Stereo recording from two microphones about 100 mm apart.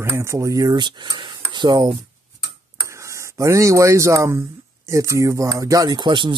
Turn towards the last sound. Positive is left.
turn(degrees=-50)  # may be behind; listen again after turning